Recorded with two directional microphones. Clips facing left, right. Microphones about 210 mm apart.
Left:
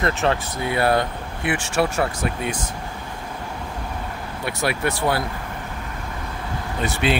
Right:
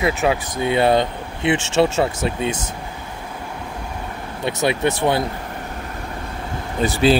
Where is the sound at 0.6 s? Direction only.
20° right (ahead or behind).